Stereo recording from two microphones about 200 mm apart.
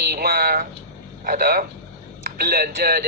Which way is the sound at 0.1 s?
50° right (ahead or behind).